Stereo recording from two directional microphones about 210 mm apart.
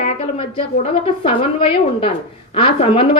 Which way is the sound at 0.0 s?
30° left (ahead or behind).